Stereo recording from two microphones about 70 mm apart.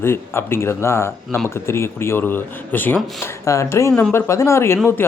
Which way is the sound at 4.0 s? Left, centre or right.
Left.